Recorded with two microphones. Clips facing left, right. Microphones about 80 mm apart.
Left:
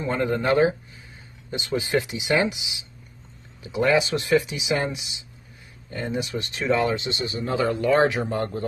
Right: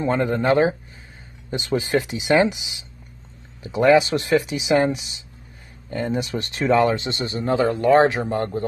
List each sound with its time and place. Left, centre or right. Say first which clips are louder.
0.0 s speech: right 3 dB; right